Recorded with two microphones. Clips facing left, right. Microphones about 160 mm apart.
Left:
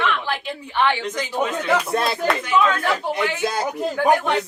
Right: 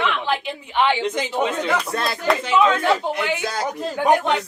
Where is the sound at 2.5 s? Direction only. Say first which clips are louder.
Right 3 dB; 25° right (ahead or behind).